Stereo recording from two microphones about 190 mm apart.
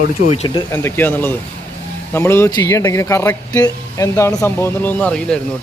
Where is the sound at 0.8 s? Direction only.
10° left (ahead or behind).